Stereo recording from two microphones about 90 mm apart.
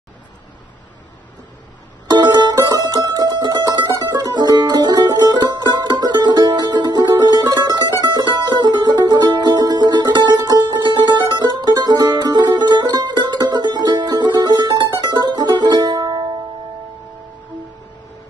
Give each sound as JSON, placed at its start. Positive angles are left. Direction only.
{"t": 2.6, "sound": "music", "side_deg": -50}